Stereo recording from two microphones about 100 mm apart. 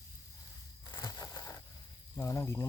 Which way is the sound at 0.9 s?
40° left (ahead or behind).